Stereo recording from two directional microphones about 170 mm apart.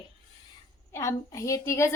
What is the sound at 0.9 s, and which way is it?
A woman's voice, 15° left (ahead or behind).